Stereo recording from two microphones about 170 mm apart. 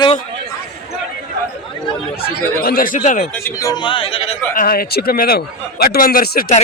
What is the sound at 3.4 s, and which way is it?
Speech, 20° left (ahead or behind).